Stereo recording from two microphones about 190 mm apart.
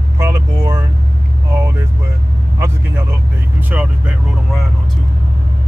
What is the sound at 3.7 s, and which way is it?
Speech, 5° right (ahead or behind).